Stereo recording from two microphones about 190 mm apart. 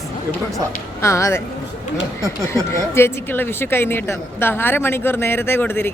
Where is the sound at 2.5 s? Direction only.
15° left (ahead or behind).